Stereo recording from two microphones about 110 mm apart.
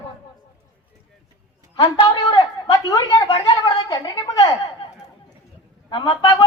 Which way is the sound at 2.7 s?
35° left (ahead or behind).